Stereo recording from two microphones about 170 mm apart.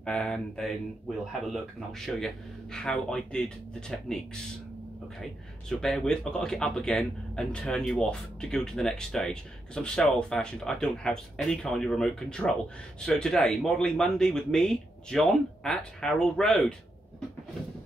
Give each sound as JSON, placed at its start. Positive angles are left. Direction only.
{"t": 0.0, "sound": "speech", "side_deg": 5}